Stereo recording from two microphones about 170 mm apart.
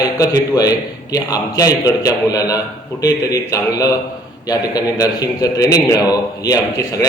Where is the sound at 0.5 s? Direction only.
20° left (ahead or behind).